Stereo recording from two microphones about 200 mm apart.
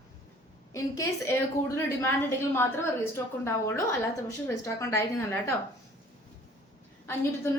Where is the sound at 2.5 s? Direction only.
10° left (ahead or behind).